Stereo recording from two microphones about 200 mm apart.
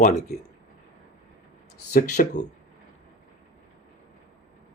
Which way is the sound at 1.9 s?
40° left (ahead or behind).